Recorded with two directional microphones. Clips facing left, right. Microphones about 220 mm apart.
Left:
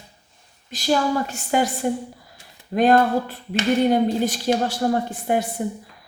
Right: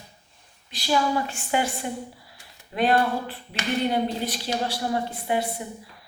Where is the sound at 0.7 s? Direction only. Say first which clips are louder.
Left 3 dB; 45° left (ahead or behind).